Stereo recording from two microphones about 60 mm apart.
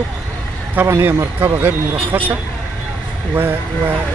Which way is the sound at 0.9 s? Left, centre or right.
Right.